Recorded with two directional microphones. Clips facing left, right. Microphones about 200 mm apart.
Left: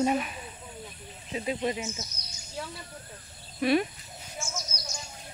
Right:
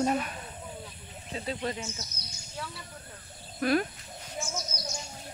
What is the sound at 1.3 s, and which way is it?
Speech, 15° left (ahead or behind).